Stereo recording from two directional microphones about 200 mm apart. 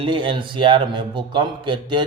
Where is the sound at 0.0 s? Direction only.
25° right (ahead or behind).